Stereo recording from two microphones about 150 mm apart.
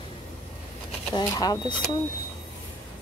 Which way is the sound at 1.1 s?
25° left (ahead or behind).